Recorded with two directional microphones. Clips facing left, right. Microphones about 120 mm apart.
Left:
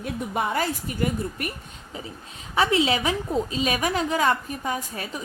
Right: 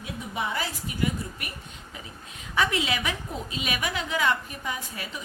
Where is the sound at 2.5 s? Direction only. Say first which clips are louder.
Left 5 dB; 30° left (ahead or behind).